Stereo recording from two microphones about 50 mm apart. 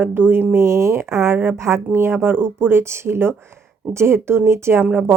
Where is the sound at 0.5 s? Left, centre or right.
Right.